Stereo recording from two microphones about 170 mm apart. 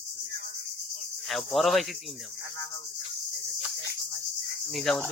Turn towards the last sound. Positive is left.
turn(degrees=0)  # may be behind; listen again after turning